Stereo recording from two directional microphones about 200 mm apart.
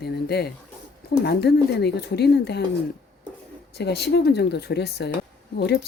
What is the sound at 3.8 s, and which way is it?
Speech, 55° left (ahead or behind).